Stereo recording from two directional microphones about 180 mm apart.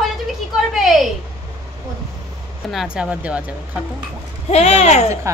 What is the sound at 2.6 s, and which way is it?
Speech, 5° right (ahead or behind).